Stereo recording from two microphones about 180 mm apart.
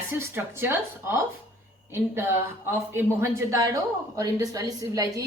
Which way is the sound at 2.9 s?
15° right (ahead or behind).